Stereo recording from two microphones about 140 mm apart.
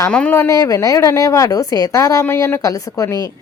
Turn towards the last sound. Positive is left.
turn(degrees=25)  # may be behind; listen again after turning